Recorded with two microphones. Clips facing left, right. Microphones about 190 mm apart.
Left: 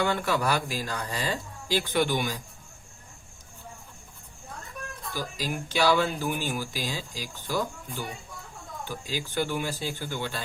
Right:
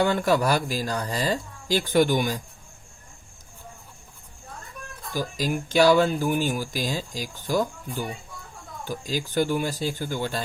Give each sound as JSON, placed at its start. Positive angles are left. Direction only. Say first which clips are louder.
{"t": 0.0, "sound": "speech", "louder": "right 5 dB", "side_deg": -40}
{"t": 5.1, "sound": "speech", "louder": "right 6 dB", "side_deg": -45}
{"t": 8.8, "sound": "speech", "louder": "right 5 dB", "side_deg": -45}